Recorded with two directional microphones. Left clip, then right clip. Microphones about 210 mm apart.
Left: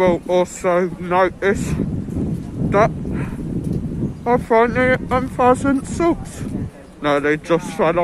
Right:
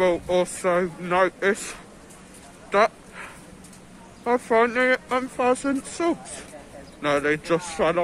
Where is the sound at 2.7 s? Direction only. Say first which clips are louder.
Left 4 dB; 5° left (ahead or behind).